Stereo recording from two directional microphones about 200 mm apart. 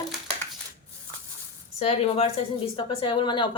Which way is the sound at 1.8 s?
30° left (ahead or behind).